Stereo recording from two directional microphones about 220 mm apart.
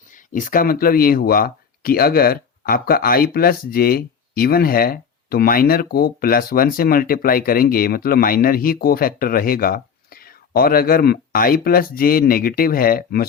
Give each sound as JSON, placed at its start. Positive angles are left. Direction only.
{"t": 0.1, "sound": "speech", "side_deg": 35}